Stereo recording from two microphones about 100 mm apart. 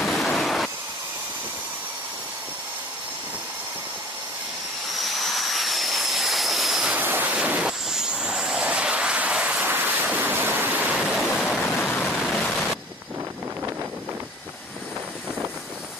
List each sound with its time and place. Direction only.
0.0 s a sound: 5° left (ahead or behind)
4.9 s vehicle: centre (ahead or behind)
7.0 s train: 20° right (ahead or behind)
7.3 s vehicle: 10° right (ahead or behind)
11.3 s a sound: centre (ahead or behind)
12.1 s pink noise: centre (ahead or behind)